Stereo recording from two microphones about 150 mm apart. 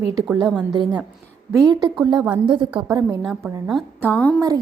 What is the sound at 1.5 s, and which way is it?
A woman's voice, 30° right (ahead or behind).